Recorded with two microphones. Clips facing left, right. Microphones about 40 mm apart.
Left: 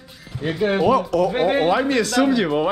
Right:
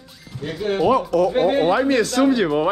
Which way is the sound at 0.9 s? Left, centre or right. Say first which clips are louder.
Right 1 dB; left.